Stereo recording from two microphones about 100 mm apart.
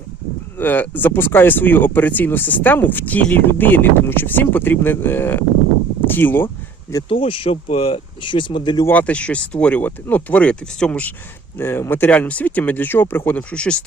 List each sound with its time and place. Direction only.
0.6 s speech: 20° left (ahead or behind)
7.1 s speech: 65° left (ahead or behind)
8.9 s speech: 15° left (ahead or behind)
11.5 s speech: 25° left (ahead or behind)